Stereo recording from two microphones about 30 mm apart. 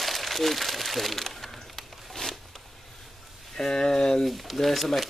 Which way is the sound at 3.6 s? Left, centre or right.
Left.